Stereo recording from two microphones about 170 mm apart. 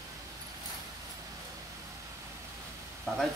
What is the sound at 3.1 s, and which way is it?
Speech, centre (ahead or behind).